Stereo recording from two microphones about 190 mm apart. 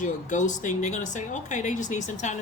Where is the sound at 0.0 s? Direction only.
40° left (ahead or behind).